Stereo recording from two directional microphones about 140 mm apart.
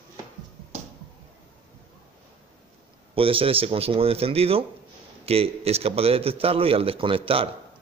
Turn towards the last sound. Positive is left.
turn(degrees=-40)  # may be behind; listen again after turning